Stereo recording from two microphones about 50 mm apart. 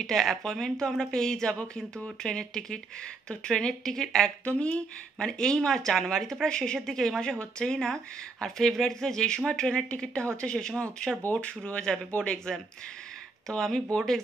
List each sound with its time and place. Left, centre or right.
0.0 s speech: centre
4.5 s speech: left
5.2 s speech: centre